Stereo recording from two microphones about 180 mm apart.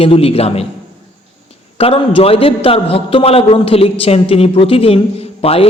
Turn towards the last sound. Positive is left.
turn(degrees=35)  # may be behind; listen again after turning